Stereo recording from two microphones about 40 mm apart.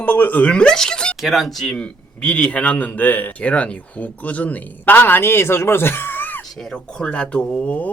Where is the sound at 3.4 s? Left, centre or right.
Left.